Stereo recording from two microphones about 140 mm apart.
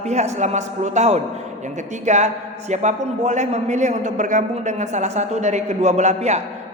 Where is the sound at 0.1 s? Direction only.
55° right (ahead or behind).